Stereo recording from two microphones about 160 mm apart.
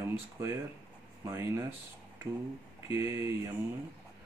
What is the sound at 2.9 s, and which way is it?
Speech, 15° right (ahead or behind).